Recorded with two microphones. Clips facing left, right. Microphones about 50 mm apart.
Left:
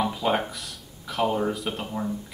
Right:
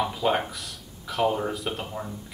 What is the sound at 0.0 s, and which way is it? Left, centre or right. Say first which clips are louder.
Speech: even; centre.